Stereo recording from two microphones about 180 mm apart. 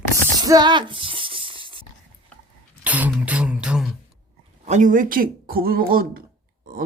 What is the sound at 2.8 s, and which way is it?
Beatboxing, 10° right (ahead or behind).